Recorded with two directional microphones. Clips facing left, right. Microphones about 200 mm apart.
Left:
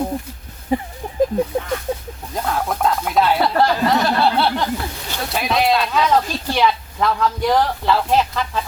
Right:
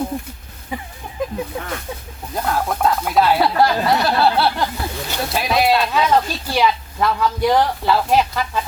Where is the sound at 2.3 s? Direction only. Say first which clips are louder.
Right 1 dB; centre (ahead or behind).